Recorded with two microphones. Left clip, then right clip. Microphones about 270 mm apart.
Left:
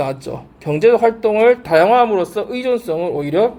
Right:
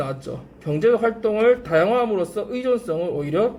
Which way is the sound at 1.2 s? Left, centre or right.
Left.